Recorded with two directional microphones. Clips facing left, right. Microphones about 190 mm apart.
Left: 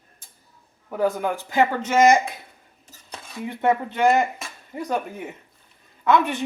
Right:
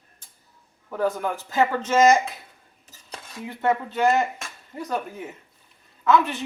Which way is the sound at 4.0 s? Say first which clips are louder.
Left 2 dB; 15° left (ahead or behind).